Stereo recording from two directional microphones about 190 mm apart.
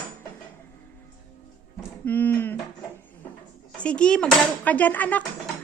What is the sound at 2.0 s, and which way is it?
Speech, 10° left (ahead or behind).